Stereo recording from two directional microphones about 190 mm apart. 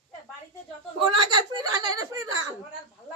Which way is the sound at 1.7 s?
20° right (ahead or behind).